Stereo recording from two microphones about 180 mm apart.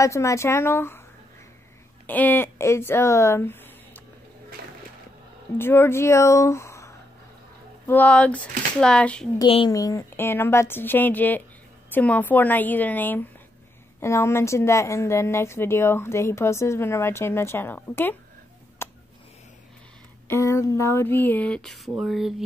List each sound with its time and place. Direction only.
0.0 s a woman's voice: 15° left (ahead or behind)
2.0 s speech: 10° left (ahead or behind)
5.6 s a woman's voice: 15° left (ahead or behind)
9.4 s speech: 30° left (ahead or behind)
9.7 s a woman's voice: 20° left (ahead or behind)
18.8 s a sound: 15° left (ahead or behind)
20.2 s a woman's voice: 15° left (ahead or behind); by 22.3 s centre (ahead or behind)